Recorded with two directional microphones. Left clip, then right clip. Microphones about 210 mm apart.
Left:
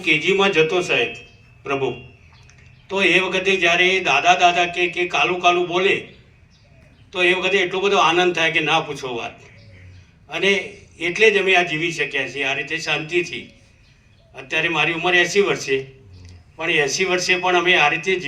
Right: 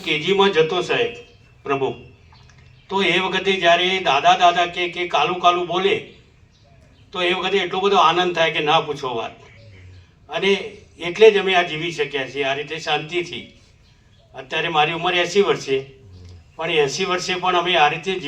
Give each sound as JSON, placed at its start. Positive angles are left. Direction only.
{"t": 0.0, "sound": "a man's voice", "side_deg": 15}
{"t": 7.3, "sound": "a man's voice", "side_deg": 15}
{"t": 14.3, "sound": "a man's voice", "side_deg": 10}
{"t": 16.7, "sound": "a man's voice", "side_deg": 10}